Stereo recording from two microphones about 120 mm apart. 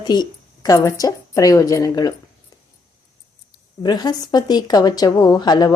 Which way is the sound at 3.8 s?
35° left (ahead or behind).